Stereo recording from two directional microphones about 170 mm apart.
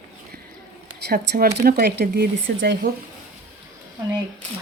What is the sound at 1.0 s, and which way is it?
Speech, 65° right (ahead or behind).